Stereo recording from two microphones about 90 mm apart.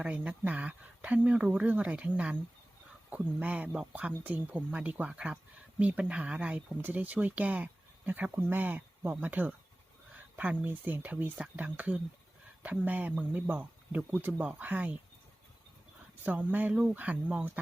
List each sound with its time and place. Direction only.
0.0 s speech: 15° right (ahead or behind)
16.2 s speech: 20° right (ahead or behind)